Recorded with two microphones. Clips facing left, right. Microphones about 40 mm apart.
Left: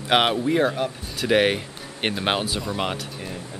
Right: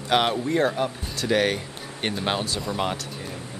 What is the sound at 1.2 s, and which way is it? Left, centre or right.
Speech, left.